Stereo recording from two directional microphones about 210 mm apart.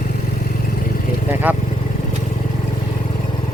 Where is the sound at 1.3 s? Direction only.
10° right (ahead or behind).